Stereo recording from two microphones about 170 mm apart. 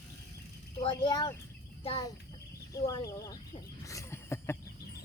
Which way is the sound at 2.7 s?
20° left (ahead or behind).